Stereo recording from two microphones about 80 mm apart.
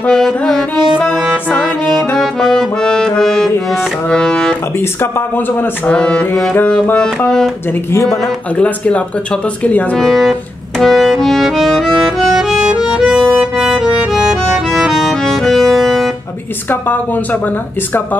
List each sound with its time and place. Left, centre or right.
0.0 s music: centre
8.6 s music: centre
9.6 s speech: left
9.9 s speech: centre
10.8 s music: centre